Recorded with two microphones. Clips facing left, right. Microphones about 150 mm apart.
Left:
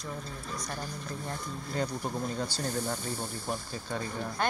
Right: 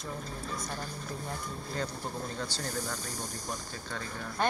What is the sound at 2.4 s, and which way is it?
Speech, 10° left (ahead or behind).